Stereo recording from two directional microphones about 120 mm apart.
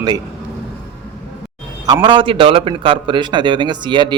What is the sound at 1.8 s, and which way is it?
A man's voice, 40° right (ahead or behind).